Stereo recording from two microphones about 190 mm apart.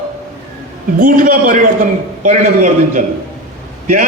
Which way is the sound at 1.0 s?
45° right (ahead or behind).